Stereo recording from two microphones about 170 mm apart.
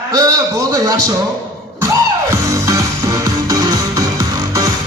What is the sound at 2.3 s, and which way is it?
Music, 15° right (ahead or behind).